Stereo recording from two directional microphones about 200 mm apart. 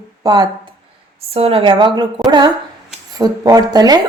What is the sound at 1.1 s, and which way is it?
A woman's voice, 30° right (ahead or behind).